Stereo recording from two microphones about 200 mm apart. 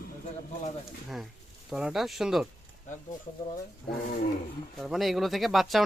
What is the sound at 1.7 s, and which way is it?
Speech, 5° right (ahead or behind).